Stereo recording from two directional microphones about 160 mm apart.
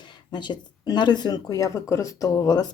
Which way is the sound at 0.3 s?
30° left (ahead or behind).